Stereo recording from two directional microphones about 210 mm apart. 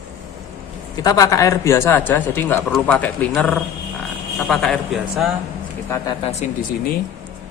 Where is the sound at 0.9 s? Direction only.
15° left (ahead or behind); by 5.3 s centre (ahead or behind).